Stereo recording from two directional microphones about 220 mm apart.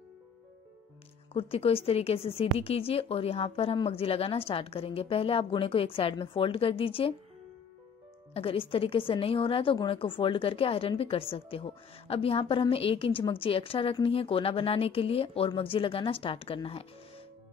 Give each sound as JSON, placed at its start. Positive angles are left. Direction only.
{"t": 1.3, "sound": "a woman's voice", "side_deg": 25}
{"t": 8.3, "sound": "a woman's voice", "side_deg": 25}